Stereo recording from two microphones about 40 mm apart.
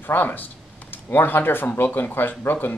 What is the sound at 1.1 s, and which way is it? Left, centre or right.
Speech, left.